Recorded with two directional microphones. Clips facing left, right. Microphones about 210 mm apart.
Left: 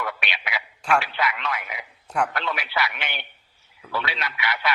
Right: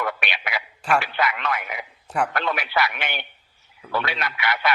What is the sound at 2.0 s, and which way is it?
Speech, 5° right (ahead or behind).